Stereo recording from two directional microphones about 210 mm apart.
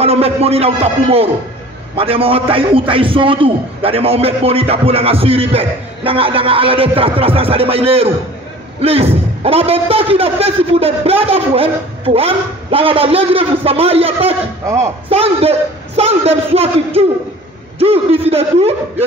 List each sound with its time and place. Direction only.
0.0 s a man's voice: 30° right (ahead or behind)